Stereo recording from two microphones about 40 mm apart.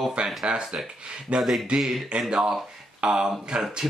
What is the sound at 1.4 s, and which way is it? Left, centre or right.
Speech, centre.